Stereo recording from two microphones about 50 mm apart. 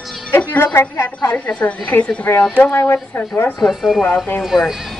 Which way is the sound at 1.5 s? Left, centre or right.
Left.